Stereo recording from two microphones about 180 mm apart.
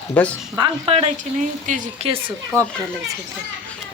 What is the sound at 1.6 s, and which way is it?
Speech, 45° right (ahead or behind).